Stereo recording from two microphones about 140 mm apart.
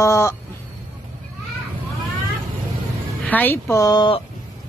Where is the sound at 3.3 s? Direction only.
15° left (ahead or behind); by 4.2 s 35° left (ahead or behind).